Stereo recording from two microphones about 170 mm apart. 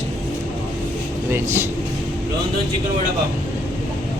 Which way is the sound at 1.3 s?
15° right (ahead or behind).